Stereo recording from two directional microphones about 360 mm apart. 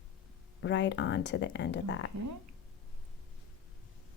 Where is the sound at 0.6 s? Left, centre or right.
Left.